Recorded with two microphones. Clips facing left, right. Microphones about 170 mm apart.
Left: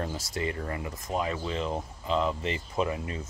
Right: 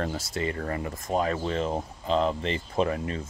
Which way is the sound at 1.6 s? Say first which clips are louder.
Right 3 dB; 30° right (ahead or behind).